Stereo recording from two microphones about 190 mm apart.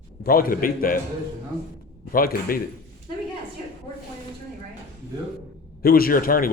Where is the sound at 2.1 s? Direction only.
50° left (ahead or behind).